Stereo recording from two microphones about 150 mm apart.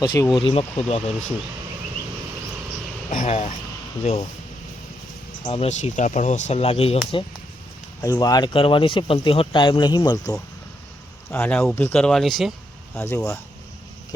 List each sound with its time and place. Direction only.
0.0 s speech: 30° left (ahead or behind)
3.1 s speech: 55° left (ahead or behind)
5.5 s speech: 45° left (ahead or behind)
8.0 s speech: 25° left (ahead or behind)
11.3 s speech: 10° left (ahead or behind)
13.0 s speech: 20° left (ahead or behind)